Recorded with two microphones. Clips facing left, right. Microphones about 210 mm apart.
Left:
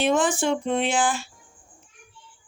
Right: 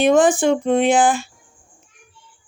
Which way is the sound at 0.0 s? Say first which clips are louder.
Right 7 dB; 55° right (ahead or behind).